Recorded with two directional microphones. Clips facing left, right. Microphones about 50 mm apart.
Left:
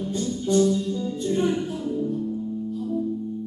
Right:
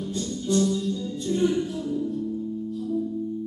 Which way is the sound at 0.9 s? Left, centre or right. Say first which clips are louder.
Left 2 dB; left.